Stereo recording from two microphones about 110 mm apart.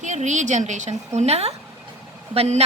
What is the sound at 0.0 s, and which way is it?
A woman's voice, 90° right.